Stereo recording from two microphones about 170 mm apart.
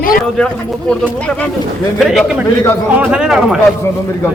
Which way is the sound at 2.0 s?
Centre (ahead or behind).